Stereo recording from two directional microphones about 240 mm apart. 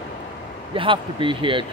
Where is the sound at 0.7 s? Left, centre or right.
Right.